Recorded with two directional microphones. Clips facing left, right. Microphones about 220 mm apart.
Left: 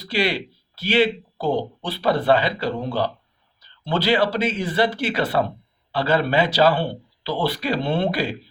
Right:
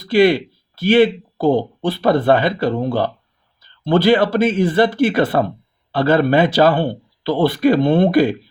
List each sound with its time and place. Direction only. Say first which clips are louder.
0.0 s speech: right 10 dB; 50° right (ahead or behind)